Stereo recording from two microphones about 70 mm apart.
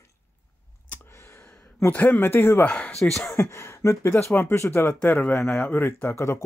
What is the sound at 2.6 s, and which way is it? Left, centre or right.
Speech, centre.